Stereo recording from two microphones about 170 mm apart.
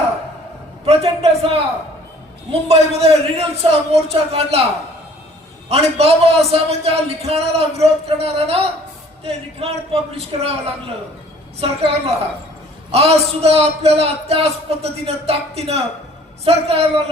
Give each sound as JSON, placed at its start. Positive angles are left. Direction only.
{"t": 0.9, "sound": "a man's voice", "side_deg": -35}
{"t": 5.6, "sound": "a man's voice", "side_deg": -35}
{"t": 11.6, "sound": "a man's voice", "side_deg": -35}